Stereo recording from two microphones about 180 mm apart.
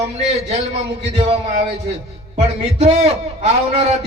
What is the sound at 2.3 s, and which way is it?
Music, 40° right (ahead or behind).